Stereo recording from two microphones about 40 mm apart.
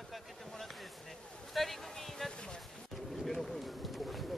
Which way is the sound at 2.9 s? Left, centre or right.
Centre.